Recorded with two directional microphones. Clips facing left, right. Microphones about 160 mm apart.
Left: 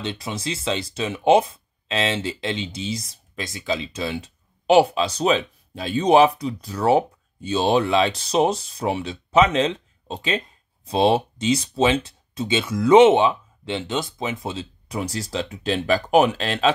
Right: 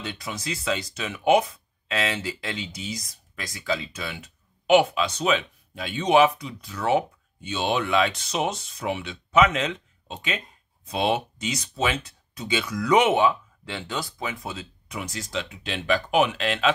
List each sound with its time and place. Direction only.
0.0 s speech: 30° left (ahead or behind)